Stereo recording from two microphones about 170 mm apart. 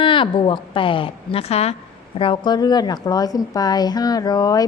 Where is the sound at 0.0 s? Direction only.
30° left (ahead or behind).